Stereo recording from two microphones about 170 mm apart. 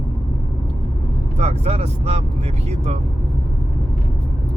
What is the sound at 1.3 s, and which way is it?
Speech, 35° right (ahead or behind).